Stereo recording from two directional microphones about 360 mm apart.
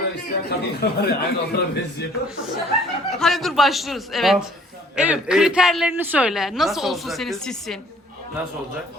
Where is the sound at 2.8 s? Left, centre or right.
Centre.